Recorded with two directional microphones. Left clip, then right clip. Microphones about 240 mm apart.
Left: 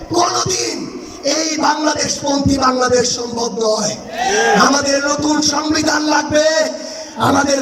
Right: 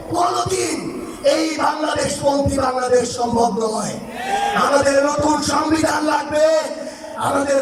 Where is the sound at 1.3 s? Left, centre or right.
Left.